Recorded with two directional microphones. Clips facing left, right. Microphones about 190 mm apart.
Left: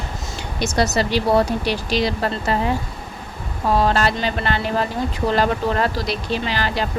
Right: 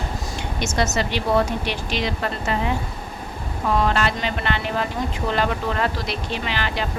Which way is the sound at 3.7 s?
35° left (ahead or behind).